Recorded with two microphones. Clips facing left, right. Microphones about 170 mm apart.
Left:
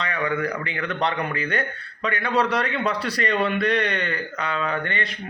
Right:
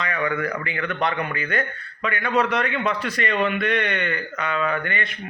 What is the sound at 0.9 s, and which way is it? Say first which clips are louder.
A man's voice: left 1 dB; 30° left (ahead or behind).